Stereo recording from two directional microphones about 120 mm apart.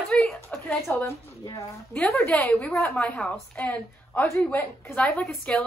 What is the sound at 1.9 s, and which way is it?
A woman's voice, 10° left (ahead or behind).